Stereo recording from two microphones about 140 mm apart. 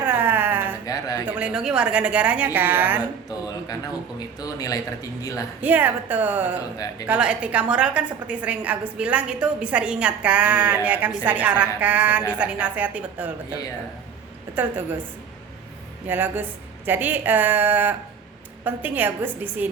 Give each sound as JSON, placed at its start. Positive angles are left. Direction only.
{"t": 0.0, "sound": "a sound", "side_deg": -15}
{"t": 0.9, "sound": "a sound", "side_deg": 25}
{"t": 1.2, "sound": "a woman's voice", "side_deg": -10}
{"t": 4.4, "sound": "speech", "side_deg": 25}
{"t": 5.6, "sound": "a woman's voice", "side_deg": -10}
{"t": 16.0, "sound": "a woman's voice", "side_deg": -15}